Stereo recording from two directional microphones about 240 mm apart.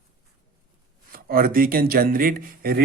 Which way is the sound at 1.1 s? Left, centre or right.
Right.